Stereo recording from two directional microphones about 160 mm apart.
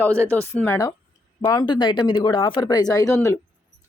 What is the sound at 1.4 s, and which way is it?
Speech, 25° left (ahead or behind).